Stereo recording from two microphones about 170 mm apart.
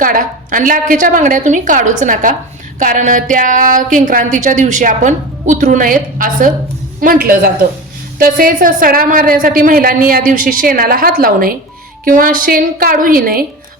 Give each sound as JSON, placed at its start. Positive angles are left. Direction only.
{"t": 0.0, "sound": "a woman's voice", "side_deg": -55}